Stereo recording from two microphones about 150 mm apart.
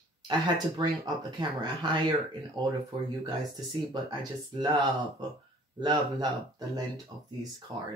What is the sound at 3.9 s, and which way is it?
Speech, 30° right (ahead or behind).